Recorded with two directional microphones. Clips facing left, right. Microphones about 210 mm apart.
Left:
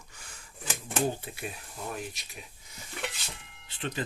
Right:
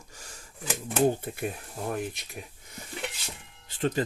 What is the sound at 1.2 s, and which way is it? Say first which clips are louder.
Speech: right 7 dB; 50° right (ahead or behind).